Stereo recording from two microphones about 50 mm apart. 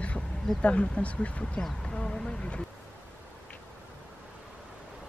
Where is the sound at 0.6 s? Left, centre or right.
Left.